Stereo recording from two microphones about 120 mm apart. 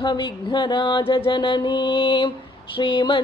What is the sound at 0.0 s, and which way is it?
Mantra, 40° left (ahead or behind).